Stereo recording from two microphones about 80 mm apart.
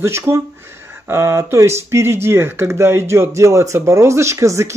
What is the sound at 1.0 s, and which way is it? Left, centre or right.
Speech, right.